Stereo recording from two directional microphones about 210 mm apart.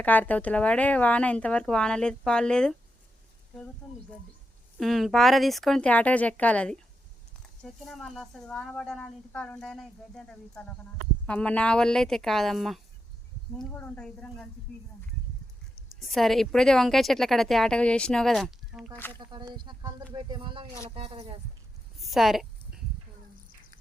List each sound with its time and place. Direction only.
0.0 s speech: 10° left (ahead or behind)
4.8 s speech: centre (ahead or behind)
15.7 s speech: centre (ahead or behind)
19.2 s speech: 20° right (ahead or behind)
21.9 s a sound: centre (ahead or behind)